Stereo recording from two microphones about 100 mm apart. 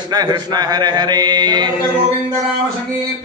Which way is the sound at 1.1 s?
45° right (ahead or behind).